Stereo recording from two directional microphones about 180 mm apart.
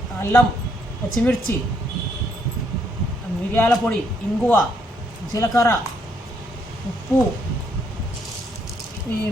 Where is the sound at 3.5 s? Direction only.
5° left (ahead or behind).